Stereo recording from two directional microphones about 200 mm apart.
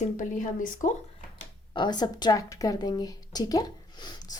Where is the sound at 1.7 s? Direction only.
20° left (ahead or behind).